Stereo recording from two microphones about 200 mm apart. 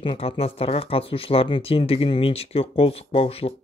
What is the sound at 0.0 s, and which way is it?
Speech, 25° left (ahead or behind).